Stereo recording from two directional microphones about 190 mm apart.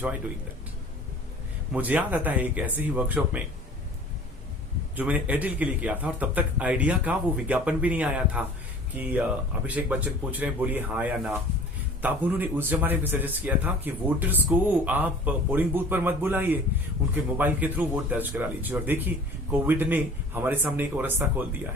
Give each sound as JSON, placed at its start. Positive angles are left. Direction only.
{"t": 1.7, "sound": "speech", "side_deg": -10}
{"t": 4.9, "sound": "speech", "side_deg": -10}